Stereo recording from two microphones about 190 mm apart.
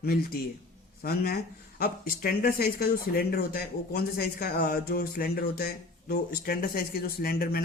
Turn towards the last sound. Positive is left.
turn(degrees=50)  # may be behind; listen again after turning